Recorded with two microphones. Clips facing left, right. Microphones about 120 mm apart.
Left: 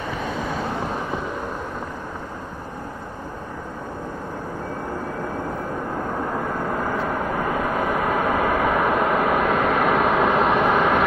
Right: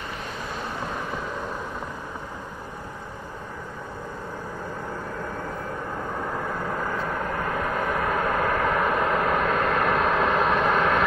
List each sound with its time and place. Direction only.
6.1 s vehicle: 5° left (ahead or behind)